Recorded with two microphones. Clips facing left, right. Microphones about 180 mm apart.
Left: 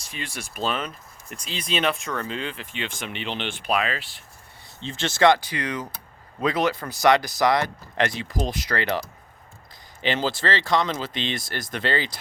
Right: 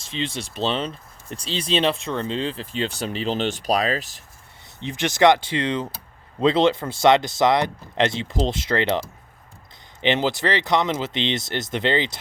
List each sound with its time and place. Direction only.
0.0 s speech: 25° right (ahead or behind); by 4.2 s 40° right (ahead or behind)
4.8 s speech: 15° right (ahead or behind)
10.0 s speech: 20° right (ahead or behind)